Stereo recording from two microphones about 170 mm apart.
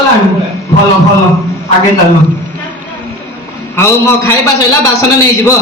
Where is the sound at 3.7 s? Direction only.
15° left (ahead or behind).